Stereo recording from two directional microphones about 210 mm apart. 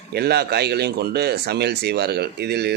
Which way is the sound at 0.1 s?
50° right (ahead or behind).